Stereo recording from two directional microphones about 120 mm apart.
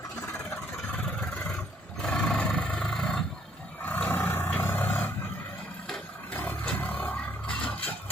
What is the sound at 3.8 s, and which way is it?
Dog, 15° left (ahead or behind).